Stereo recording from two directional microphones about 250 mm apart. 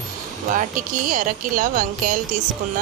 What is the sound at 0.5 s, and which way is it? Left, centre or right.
Speech, right.